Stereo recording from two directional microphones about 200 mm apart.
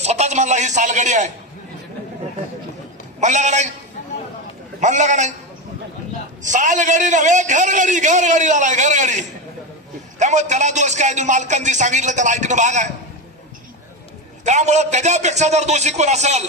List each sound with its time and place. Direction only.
0.0 s a man's voice: 35° right (ahead or behind)
3.2 s a man's voice: 35° right (ahead or behind)
4.7 s a man's voice: 35° right (ahead or behind)
6.4 s a man's voice: 40° right (ahead or behind)
14.4 s a man's voice: 35° right (ahead or behind)